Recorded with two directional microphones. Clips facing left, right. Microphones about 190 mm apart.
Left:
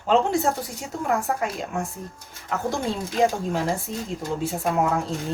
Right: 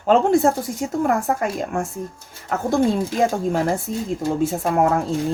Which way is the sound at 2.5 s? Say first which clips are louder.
Right 7 dB; 55° right (ahead or behind).